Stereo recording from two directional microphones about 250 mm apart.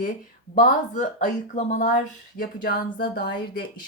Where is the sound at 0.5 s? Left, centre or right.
Left.